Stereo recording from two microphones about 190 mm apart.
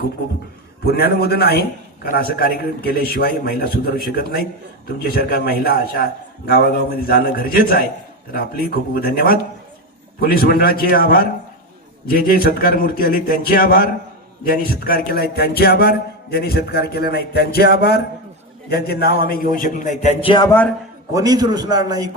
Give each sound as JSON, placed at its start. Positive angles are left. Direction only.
{"t": 0.9, "sound": "a man's voice", "side_deg": 55}
{"t": 20.5, "sound": "a man's voice", "side_deg": 10}
{"t": 21.1, "sound": "a man's voice", "side_deg": -20}